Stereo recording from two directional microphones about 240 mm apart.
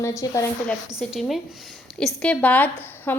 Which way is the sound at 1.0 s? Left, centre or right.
Centre.